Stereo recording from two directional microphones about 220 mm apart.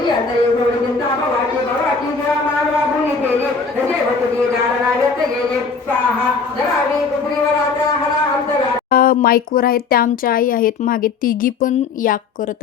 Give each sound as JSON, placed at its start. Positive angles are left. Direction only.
{"t": 8.9, "sound": "speech", "side_deg": 40}